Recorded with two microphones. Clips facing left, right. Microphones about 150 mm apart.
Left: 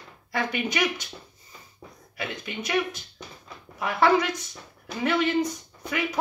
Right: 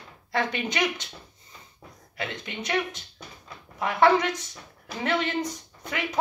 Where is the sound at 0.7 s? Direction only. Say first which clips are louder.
Left 1 dB; 20° right (ahead or behind).